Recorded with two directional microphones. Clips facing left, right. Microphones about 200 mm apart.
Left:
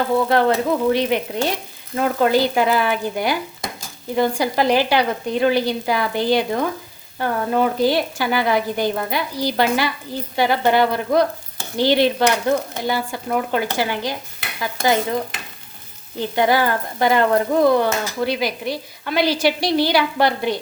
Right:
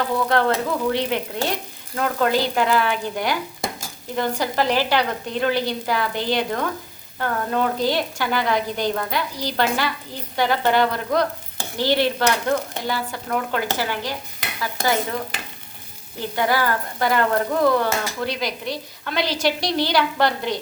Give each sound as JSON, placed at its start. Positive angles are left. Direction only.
{"t": 0.3, "sound": "speech", "side_deg": 15}
{"t": 16.3, "sound": "speech", "side_deg": 20}